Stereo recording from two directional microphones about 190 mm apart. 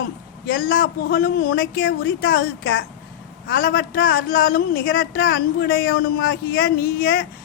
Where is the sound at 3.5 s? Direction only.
50° left (ahead or behind).